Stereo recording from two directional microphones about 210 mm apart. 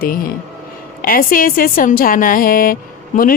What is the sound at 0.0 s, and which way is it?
A woman's voice, 40° left (ahead or behind).